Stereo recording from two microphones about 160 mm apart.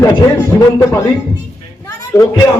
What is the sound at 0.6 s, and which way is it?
A man's voice, 20° left (ahead or behind).